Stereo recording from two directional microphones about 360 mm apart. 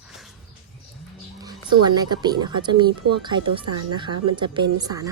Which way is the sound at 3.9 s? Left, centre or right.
Centre.